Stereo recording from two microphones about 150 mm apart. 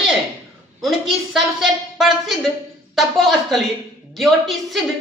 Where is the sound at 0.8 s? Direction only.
Centre (ahead or behind).